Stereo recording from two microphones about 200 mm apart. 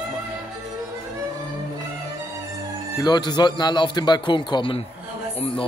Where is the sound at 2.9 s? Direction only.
20° left (ahead or behind).